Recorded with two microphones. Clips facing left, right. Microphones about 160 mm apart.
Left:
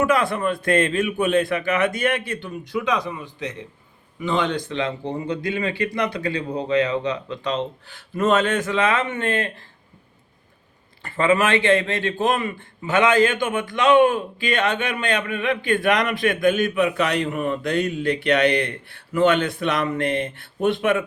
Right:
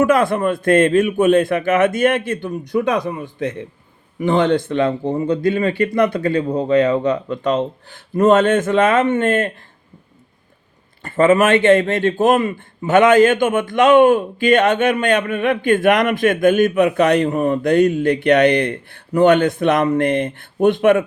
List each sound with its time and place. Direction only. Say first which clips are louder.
0.0 s a man's voice: right 5 dB; 45° right (ahead or behind)
11.0 s a man's voice: right 6 dB; 45° right (ahead or behind)